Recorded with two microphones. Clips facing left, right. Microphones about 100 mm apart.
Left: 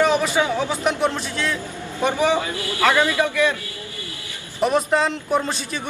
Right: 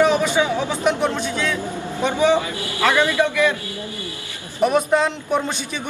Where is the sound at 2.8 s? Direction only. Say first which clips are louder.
Even; 20° left (ahead or behind).